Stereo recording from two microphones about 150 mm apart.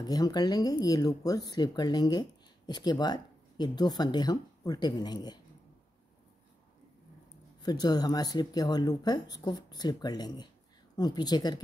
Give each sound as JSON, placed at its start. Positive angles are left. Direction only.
{"t": 0.0, "sound": "speech", "side_deg": 25}
{"t": 7.6, "sound": "speech", "side_deg": 25}